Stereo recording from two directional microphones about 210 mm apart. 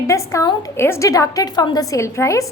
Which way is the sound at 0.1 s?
15° left (ahead or behind).